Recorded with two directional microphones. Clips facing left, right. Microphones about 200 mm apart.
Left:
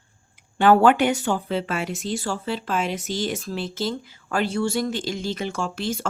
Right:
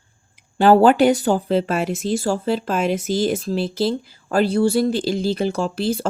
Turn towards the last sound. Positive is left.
turn(degrees=-35)  # may be behind; listen again after turning